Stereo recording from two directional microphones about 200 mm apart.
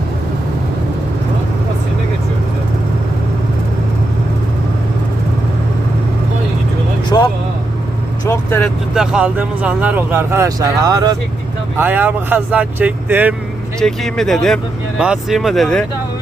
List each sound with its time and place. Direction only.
7.1 s vehicle: 20° left (ahead or behind)
9.0 s speech: 5° right (ahead or behind)
11.8 s speech: 10° right (ahead or behind)
13.7 s speech: centre (ahead or behind)